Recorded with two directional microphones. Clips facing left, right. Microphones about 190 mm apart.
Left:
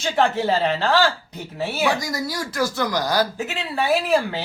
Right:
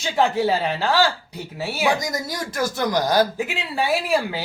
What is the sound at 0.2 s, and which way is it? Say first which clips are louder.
Speech: even; 10° right (ahead or behind).